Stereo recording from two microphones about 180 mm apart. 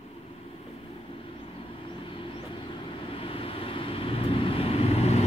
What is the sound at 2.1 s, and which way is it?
Vehicle, 30° left (ahead or behind).